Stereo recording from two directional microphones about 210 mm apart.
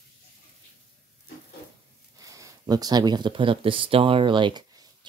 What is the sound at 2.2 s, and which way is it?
Speech, 15° right (ahead or behind).